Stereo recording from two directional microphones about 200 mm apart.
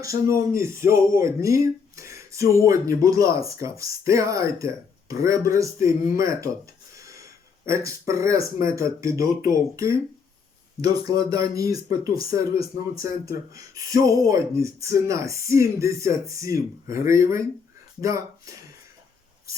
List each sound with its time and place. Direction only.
0.0 s speech: 15° right (ahead or behind)
6.9 s a sound: 15° right (ahead or behind)
7.9 s speech: 15° right (ahead or behind)
11.0 s speech: 20° right (ahead or behind)